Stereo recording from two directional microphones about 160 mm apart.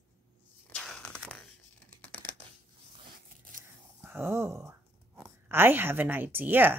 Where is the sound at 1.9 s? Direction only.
10° left (ahead or behind).